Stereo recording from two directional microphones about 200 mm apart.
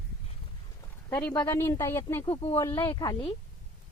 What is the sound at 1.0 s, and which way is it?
A woman's voice, 10° left (ahead or behind).